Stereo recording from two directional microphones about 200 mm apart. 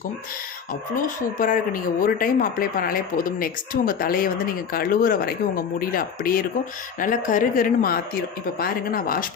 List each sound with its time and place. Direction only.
1.4 s speech: 45° left (ahead or behind)